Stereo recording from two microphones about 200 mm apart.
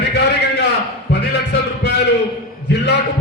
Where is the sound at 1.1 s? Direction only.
55° left (ahead or behind).